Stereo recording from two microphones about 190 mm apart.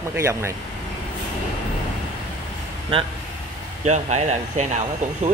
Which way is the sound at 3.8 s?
35° right (ahead or behind).